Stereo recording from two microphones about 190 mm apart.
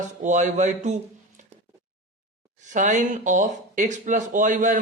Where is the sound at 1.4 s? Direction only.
40° right (ahead or behind).